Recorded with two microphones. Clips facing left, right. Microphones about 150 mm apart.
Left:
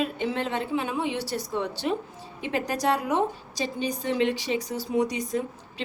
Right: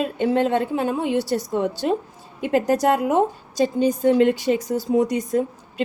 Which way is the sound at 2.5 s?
50° right (ahead or behind).